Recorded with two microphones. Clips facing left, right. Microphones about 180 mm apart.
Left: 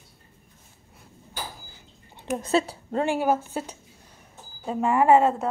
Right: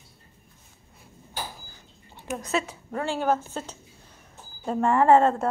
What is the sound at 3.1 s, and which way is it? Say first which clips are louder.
A woman's voice: even; 10° left (ahead or behind).